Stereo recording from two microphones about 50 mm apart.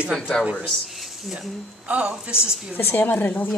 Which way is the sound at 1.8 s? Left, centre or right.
Right.